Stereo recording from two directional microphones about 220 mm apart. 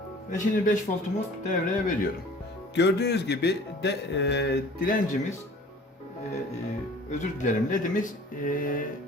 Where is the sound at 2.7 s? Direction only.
50° left (ahead or behind).